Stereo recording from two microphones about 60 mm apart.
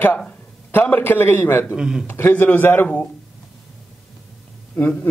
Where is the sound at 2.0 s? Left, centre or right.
Left.